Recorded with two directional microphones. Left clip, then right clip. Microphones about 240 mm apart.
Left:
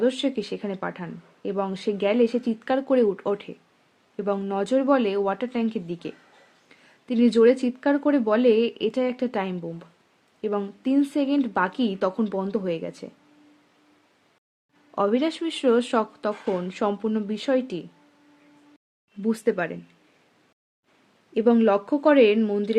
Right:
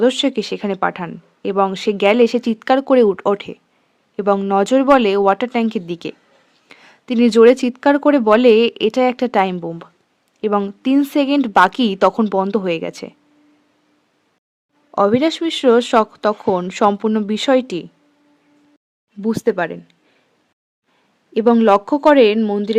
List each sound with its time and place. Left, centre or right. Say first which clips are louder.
0.0 s speech: right 8 dB; right
14.9 s speech: right 9 dB; right
19.2 s speech: right 6 dB; right
21.3 s speech: right 7 dB; right